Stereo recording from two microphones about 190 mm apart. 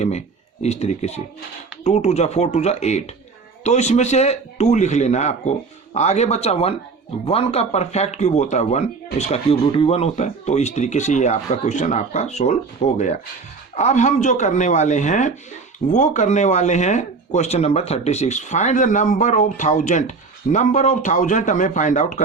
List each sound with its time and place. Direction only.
0.0 s a man's voice: 35° left (ahead or behind)